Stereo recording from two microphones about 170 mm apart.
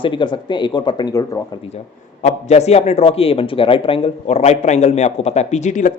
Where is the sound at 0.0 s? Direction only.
30° left (ahead or behind).